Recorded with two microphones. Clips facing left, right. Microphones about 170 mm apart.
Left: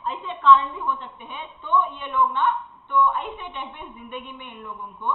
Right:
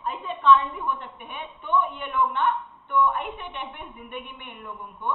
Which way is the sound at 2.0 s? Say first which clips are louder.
Left 2 dB; 50° right (ahead or behind).